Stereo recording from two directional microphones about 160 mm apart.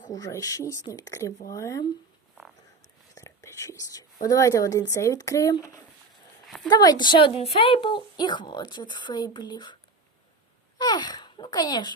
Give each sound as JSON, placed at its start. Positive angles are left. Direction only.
{"t": 0.1, "sound": "a woman's voice", "side_deg": 20}
{"t": 3.2, "sound": "speech", "side_deg": 20}
{"t": 6.7, "sound": "a woman's voice", "side_deg": 25}
{"t": 10.8, "sound": "speech", "side_deg": 25}